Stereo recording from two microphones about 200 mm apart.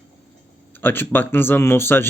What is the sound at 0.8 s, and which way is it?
Speech, 10° left (ahead or behind).